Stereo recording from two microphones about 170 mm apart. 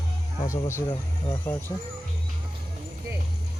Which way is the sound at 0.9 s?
25° left (ahead or behind).